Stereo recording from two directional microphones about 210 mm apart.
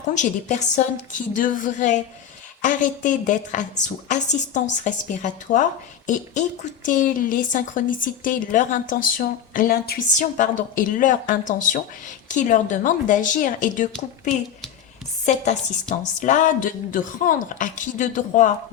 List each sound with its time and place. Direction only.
0.1 s a woman's voice: 35° left (ahead or behind)